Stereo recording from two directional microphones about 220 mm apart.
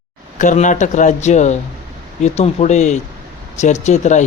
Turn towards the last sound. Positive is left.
turn(degrees=30)  # may be behind; listen again after turning